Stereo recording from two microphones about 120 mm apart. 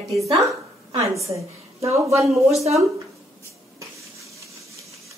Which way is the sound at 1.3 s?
25° right (ahead or behind).